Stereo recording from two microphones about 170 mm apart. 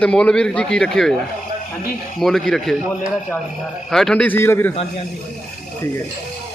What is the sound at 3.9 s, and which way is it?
Speech, 5° left (ahead or behind).